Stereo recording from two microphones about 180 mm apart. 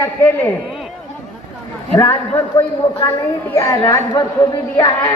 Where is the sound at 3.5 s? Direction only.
15° left (ahead or behind).